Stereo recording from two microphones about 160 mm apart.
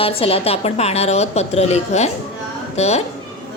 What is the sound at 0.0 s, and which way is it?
A woman's voice, 35° left (ahead or behind).